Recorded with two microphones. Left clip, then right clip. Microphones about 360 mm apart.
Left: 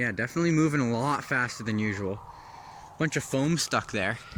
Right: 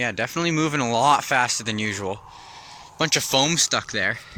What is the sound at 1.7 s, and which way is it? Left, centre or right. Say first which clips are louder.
Speech: right 5 dB; right.